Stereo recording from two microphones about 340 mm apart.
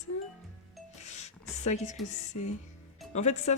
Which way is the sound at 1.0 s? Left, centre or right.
Centre.